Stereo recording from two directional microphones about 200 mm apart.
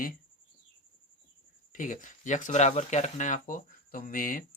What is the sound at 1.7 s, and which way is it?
Speech, 40° left (ahead or behind).